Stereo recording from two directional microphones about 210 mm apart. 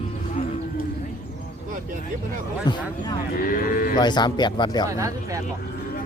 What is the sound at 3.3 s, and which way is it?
Speech, 40° left (ahead or behind).